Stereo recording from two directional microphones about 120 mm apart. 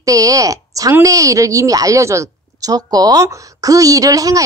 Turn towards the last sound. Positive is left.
turn(degrees=-30)  # may be behind; listen again after turning